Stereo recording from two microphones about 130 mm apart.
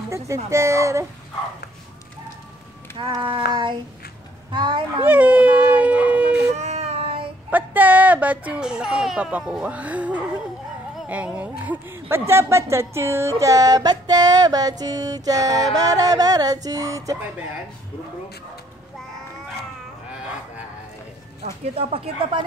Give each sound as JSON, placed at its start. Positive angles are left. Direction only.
{"t": 0.3, "sound": "a woman's voice", "side_deg": -20}
{"t": 3.0, "sound": "speech", "side_deg": -40}
{"t": 5.0, "sound": "howl", "side_deg": -15}
{"t": 6.5, "sound": "baby cry", "side_deg": -60}
{"t": 7.5, "sound": "a woman's voice", "side_deg": -15}
{"t": 21.5, "sound": "speech", "side_deg": -50}